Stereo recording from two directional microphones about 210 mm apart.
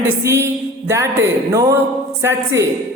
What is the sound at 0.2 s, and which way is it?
A man's voice, 10° right (ahead or behind).